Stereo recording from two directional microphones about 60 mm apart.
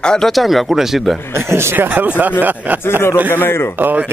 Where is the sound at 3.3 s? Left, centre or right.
Left.